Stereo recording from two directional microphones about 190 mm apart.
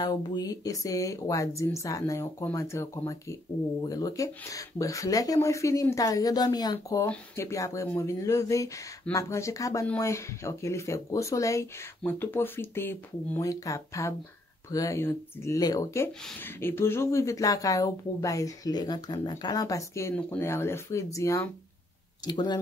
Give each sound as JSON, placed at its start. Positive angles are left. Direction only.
{"t": 0.0, "sound": "speech", "side_deg": 20}